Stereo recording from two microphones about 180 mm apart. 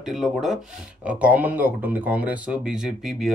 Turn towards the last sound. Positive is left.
turn(degrees=0)  # may be behind; listen again after turning